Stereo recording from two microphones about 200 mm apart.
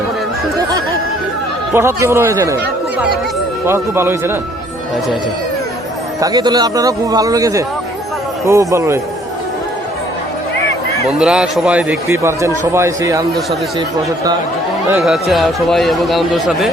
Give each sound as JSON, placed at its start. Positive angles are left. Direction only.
{"t": 1.7, "sound": "speech", "side_deg": -10}
{"t": 3.7, "sound": "speech", "side_deg": -10}
{"t": 6.1, "sound": "speech", "side_deg": -20}
{"t": 11.2, "sound": "a man's voice", "side_deg": -5}
{"t": 14.8, "sound": "a man's voice", "side_deg": -5}